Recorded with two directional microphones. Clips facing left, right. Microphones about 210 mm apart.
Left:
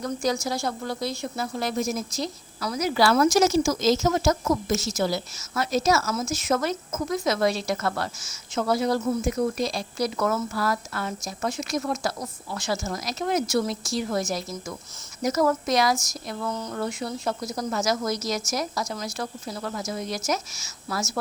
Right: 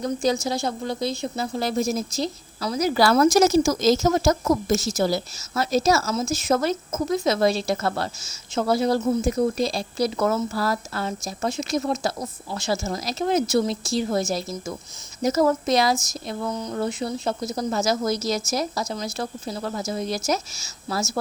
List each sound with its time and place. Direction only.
0.0 s speech: 25° right (ahead or behind)